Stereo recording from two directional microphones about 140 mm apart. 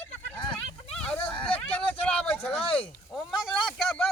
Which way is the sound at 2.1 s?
10° left (ahead or behind).